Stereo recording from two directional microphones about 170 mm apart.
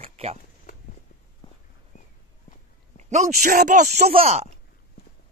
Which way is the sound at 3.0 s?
40° right (ahead or behind).